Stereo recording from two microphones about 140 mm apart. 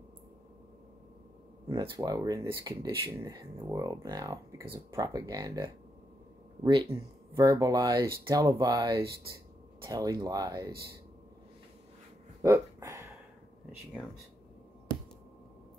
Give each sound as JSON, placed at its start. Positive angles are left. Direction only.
{"t": 1.7, "sound": "speech", "side_deg": -25}
{"t": 6.9, "sound": "speech", "side_deg": -25}
{"t": 12.4, "sound": "a sound", "side_deg": -20}